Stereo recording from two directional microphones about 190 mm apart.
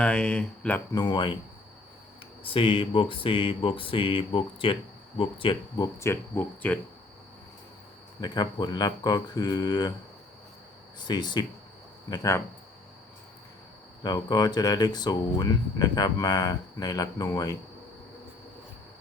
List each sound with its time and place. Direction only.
0.0 s speech: 5° left (ahead or behind)
0.9 s speech: 25° left (ahead or behind)
2.4 s speech: 30° left (ahead or behind); by 6.7 s 10° left (ahead or behind)
8.2 s speech: 20° left (ahead or behind)
11.0 s speech: 20° left (ahead or behind)
14.0 s speech: 20° left (ahead or behind)